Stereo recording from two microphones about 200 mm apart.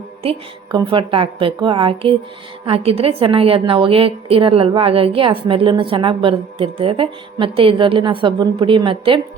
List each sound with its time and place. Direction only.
0.2 s a woman's voice: 30° right (ahead or behind)